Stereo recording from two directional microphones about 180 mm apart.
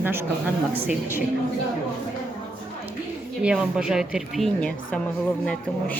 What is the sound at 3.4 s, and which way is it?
A woman's voice, 5° right (ahead or behind).